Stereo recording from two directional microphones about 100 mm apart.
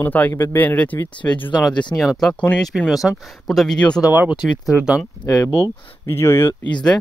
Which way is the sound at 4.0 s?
15° right (ahead or behind).